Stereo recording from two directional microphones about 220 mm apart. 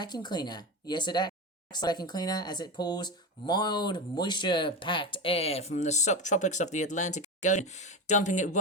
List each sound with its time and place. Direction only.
0.0 s speech: 20° left (ahead or behind)